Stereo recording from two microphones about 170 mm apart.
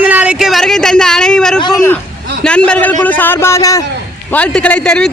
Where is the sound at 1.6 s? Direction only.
20° left (ahead or behind).